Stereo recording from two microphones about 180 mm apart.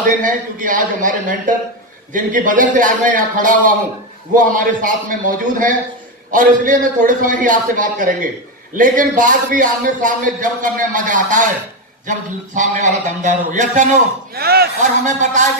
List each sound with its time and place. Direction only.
0.0 s a man's voice: 45° right (ahead or behind)
14.8 s a man's voice: 45° right (ahead or behind)